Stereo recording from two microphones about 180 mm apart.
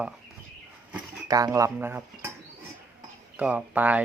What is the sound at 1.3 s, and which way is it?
Speech, 20° right (ahead or behind).